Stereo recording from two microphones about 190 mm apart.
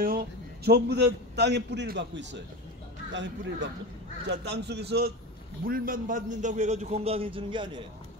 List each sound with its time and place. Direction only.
0.0 s a man's voice: 50° right (ahead or behind)
5.7 s a man's voice: 45° right (ahead or behind); by 7.8 s 25° right (ahead or behind)